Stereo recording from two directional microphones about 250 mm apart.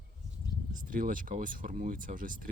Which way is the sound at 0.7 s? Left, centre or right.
Right.